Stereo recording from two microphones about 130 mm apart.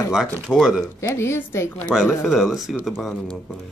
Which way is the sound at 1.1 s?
20° left (ahead or behind).